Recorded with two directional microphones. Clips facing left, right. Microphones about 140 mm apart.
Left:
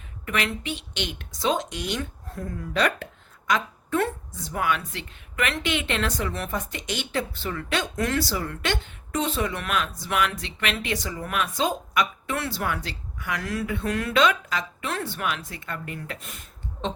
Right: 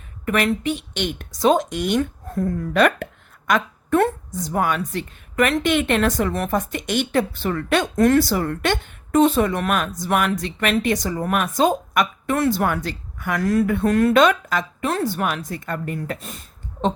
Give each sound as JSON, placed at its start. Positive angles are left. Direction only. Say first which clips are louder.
{"t": 0.3, "sound": "speech", "louder": "right 8 dB", "side_deg": -45}